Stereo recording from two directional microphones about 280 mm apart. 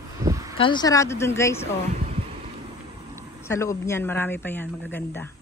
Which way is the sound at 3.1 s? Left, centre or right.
Centre.